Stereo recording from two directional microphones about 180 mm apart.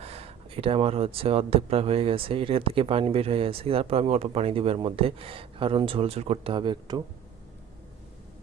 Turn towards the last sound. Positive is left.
turn(degrees=-25)  # may be behind; listen again after turning